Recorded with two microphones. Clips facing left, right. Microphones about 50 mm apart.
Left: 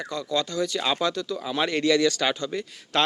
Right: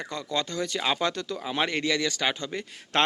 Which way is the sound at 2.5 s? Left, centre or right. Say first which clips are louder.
Left 1 dB; right.